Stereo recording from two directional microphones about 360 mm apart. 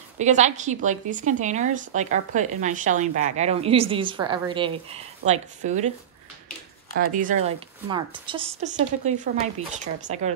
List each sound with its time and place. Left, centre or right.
0.2 s a woman's voice: centre
7.2 s a woman's voice: right